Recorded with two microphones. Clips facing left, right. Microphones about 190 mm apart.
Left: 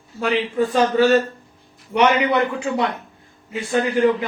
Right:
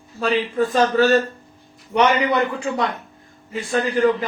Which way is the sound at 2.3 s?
10° left (ahead or behind).